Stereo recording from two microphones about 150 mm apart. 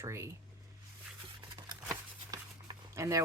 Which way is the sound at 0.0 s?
20° right (ahead or behind).